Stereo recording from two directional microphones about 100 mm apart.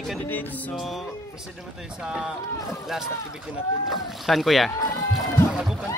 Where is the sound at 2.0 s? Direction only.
5° right (ahead or behind).